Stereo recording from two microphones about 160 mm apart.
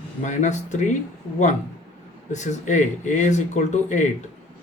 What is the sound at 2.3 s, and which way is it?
Speech, 50° left (ahead or behind).